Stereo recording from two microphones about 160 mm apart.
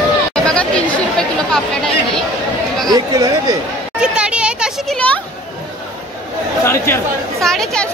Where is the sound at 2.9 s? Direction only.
20° right (ahead or behind).